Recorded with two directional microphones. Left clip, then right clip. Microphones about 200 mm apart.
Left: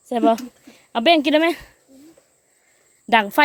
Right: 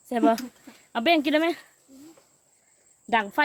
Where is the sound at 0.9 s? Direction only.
25° left (ahead or behind).